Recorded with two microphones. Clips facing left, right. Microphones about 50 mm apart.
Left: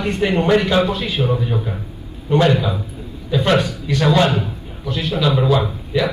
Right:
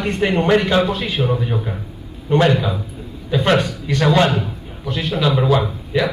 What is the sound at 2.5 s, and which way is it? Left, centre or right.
Speech, right.